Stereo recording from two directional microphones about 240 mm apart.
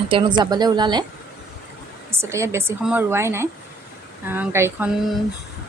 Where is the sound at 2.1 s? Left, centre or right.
Centre.